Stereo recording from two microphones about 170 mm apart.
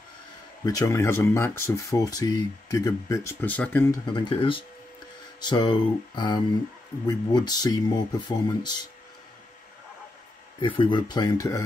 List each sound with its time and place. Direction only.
0.7 s speech: 20° left (ahead or behind)
4.0 s speech: 25° left (ahead or behind)
10.6 s speech: 30° left (ahead or behind)